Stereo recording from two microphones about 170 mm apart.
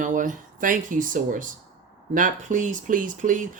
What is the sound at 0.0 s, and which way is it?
Speech, 50° right (ahead or behind).